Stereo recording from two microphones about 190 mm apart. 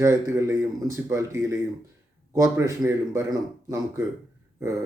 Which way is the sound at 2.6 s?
15° right (ahead or behind).